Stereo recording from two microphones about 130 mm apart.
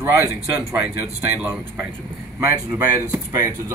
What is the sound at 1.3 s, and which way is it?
Speech, 10° right (ahead or behind).